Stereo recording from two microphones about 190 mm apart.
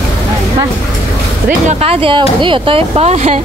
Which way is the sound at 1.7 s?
30° right (ahead or behind).